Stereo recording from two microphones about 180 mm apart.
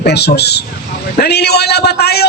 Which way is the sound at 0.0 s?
65° left (ahead or behind).